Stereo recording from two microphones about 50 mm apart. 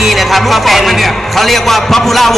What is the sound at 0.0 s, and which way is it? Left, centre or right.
A man's voice, centre.